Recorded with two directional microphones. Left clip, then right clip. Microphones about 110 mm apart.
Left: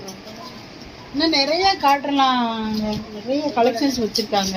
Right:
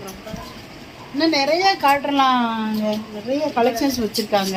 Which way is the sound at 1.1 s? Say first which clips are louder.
Right 1 dB; 60° right (ahead or behind).